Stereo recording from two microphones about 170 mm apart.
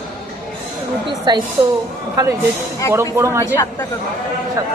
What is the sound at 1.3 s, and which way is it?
Speech, 25° right (ahead or behind).